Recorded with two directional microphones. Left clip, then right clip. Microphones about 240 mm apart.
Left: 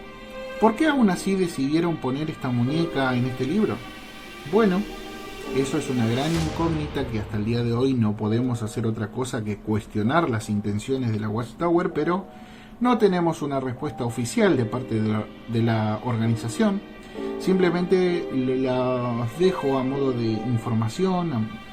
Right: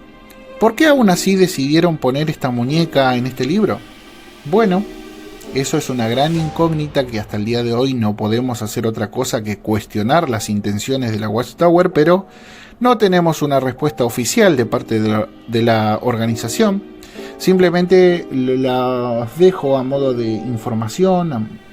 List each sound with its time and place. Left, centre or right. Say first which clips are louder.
0.6 s speech: right 8 dB; right
4.5 s speech: right 7 dB; right